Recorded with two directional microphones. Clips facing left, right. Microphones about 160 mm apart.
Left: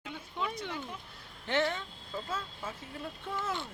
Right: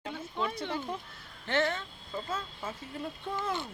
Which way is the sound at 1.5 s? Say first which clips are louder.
Right 1 dB; 15° left (ahead or behind).